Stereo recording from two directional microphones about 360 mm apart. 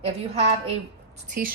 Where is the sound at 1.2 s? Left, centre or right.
Right.